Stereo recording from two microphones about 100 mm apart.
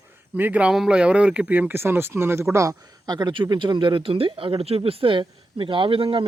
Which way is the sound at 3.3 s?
55° right (ahead or behind).